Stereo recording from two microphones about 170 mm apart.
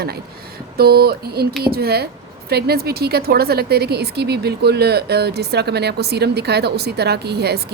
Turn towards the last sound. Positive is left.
turn(degrees=-75)  # may be behind; listen again after turning